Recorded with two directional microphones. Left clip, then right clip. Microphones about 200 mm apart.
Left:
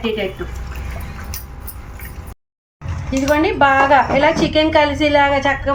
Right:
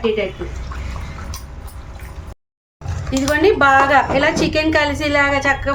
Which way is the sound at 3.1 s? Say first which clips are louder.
Right 1 dB; 55° right (ahead or behind).